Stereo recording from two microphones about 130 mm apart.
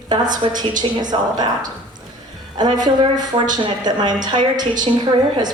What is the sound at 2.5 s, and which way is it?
A woman's voice, 35° right (ahead or behind).